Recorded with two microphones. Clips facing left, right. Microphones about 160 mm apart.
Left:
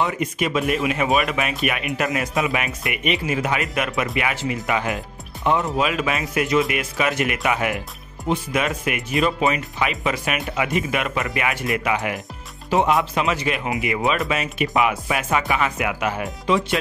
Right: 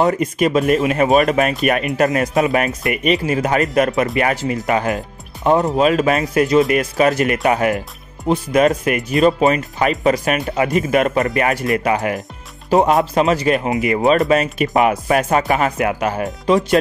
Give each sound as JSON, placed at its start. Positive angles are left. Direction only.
{"t": 0.0, "sound": "speech", "side_deg": -40}